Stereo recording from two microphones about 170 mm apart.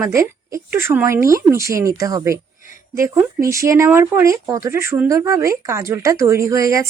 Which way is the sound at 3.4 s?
15° right (ahead or behind).